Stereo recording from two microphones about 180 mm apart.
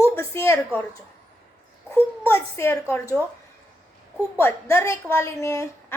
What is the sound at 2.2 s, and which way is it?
Speech, 15° left (ahead or behind).